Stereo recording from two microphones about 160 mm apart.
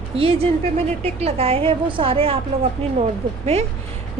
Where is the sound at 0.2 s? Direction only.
35° right (ahead or behind).